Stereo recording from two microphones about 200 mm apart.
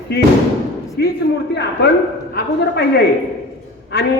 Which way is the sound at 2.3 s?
55° left (ahead or behind).